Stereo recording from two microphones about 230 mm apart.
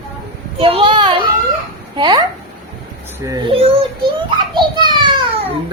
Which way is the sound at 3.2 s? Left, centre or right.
Right.